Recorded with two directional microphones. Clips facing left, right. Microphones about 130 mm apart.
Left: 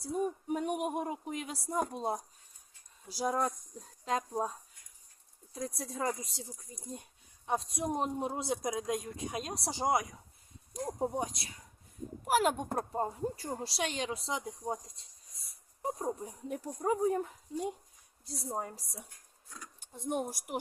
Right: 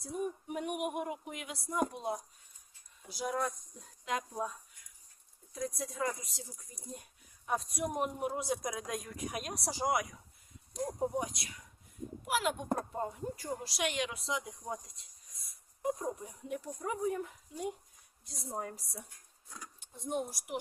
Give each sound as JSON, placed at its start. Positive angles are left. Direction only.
{"t": 0.0, "sound": "a sound", "side_deg": 30}
{"t": 1.9, "sound": "speech", "side_deg": 35}
{"t": 5.5, "sound": "speech", "side_deg": 30}
{"t": 12.2, "sound": "a woman's voice", "side_deg": 45}
{"t": 12.9, "sound": "speech", "side_deg": 35}
{"t": 19.8, "sound": "speech", "side_deg": 55}